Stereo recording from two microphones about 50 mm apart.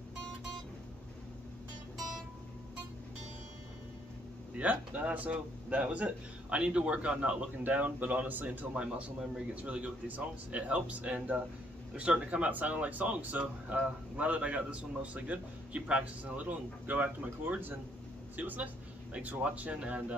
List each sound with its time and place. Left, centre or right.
4.6 s speech: right